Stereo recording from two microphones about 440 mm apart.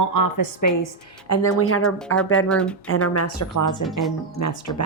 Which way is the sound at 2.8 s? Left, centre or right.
Left.